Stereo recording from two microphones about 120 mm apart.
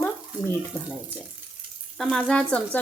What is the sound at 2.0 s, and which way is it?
Speech, 5° left (ahead or behind).